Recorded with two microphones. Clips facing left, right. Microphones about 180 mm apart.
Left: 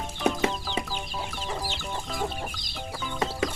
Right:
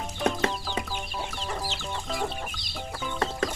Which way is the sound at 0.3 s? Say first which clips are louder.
Left 2 dB; 5° left (ahead or behind).